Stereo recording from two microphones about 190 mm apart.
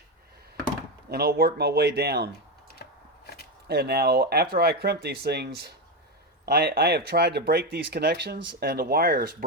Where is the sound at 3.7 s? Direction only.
55° right (ahead or behind).